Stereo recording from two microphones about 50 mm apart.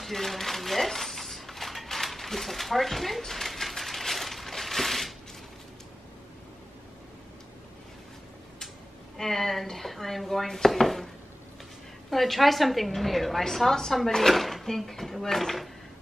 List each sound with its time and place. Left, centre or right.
0.0 s a sound: centre
9.1 s a woman's voice: centre
12.1 s a woman's voice: centre